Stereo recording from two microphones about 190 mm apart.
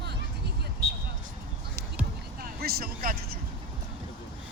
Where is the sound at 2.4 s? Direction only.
55° right (ahead or behind).